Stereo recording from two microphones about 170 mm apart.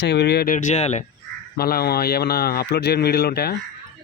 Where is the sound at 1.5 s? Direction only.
65° left (ahead or behind).